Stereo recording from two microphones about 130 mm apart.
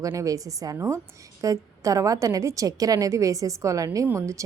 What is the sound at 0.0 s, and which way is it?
A woman's voice, 25° right (ahead or behind).